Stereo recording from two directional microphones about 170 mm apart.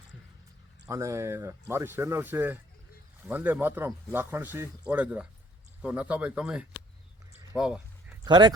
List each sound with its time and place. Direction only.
0.9 s speech: 20° right (ahead or behind)
8.2 s speech: 25° right (ahead or behind)